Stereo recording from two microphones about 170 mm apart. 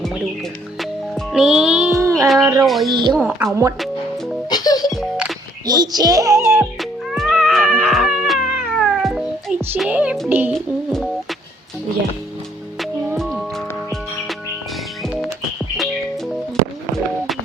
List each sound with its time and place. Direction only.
0.8 s music: centre (ahead or behind)
2.6 s speech: centre (ahead or behind)
3.2 s music: 10° right (ahead or behind)
4.4 s music: 25° left (ahead or behind)
4.9 s music: centre (ahead or behind)
5.6 s a child's voice: 25° right (ahead or behind)
6.7 s cat: centre (ahead or behind)
9.9 s music: 10° right (ahead or behind)
10.5 s music: centre (ahead or behind)
12.8 s music: centre (ahead or behind)
15.0 s music: centre (ahead or behind)